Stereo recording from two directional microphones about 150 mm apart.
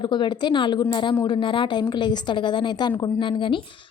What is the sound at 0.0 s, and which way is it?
A woman's voice, 30° left (ahead or behind).